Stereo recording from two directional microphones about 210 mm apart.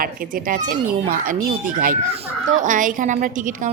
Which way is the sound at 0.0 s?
45° right (ahead or behind).